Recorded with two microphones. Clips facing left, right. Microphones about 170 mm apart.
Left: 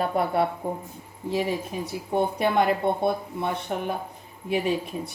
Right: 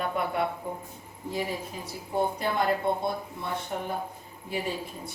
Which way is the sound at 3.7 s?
70° left (ahead or behind).